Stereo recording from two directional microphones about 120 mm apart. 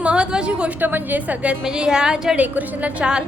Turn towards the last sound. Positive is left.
turn(degrees=-10)  # may be behind; listen again after turning